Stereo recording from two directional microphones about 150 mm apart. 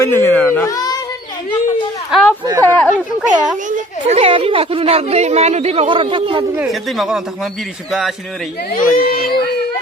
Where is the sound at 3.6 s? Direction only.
55° right (ahead or behind).